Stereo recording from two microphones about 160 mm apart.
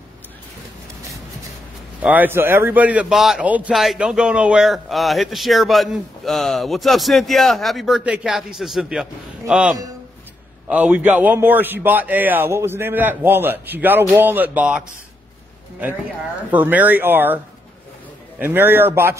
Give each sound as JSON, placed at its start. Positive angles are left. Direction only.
{"t": 2.0, "sound": "a man's voice", "side_deg": -10}
{"t": 16.5, "sound": "a man's voice", "side_deg": -10}
{"t": 18.4, "sound": "a man's voice", "side_deg": -10}